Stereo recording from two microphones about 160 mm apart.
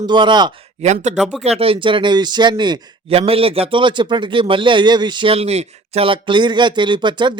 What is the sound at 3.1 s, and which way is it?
A man's voice, 40° right (ahead or behind).